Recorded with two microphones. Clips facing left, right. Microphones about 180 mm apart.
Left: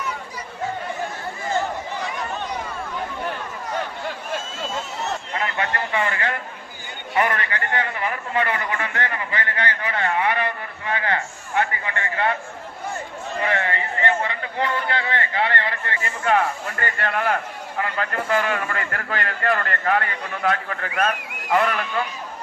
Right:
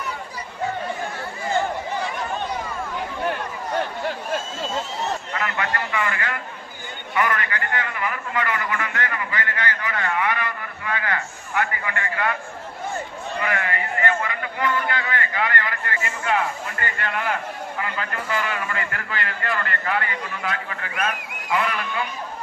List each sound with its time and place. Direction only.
5.3 s a sound: 30° left (ahead or behind)
7.1 s a man's voice: 30° left (ahead or behind)
13.4 s a man's voice: 30° left (ahead or behind)
16.2 s speech: 45° left (ahead or behind)